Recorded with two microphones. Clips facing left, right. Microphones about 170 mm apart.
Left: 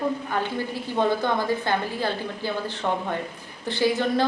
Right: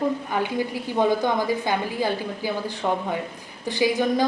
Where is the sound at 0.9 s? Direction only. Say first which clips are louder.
Right 2 dB; 15° right (ahead or behind).